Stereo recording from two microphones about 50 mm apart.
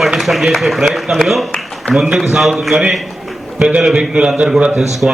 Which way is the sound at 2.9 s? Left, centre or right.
Centre.